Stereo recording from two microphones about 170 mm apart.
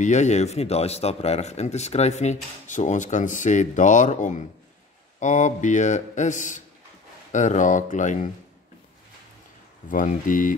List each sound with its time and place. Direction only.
0.0 s speech: 45° left (ahead or behind)
9.8 s speech: 50° left (ahead or behind)